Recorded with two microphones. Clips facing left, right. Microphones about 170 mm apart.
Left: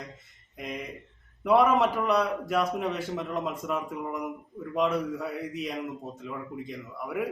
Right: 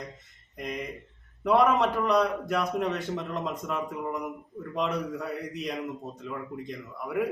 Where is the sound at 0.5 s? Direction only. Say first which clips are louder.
Right 2 dB; centre (ahead or behind).